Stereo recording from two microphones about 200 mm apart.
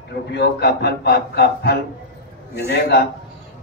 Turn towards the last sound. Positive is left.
turn(degrees=55)  # may be behind; listen again after turning